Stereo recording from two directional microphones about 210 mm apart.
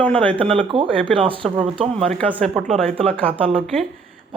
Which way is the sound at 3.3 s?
25° right (ahead or behind).